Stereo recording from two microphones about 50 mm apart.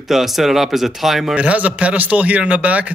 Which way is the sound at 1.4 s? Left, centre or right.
Right.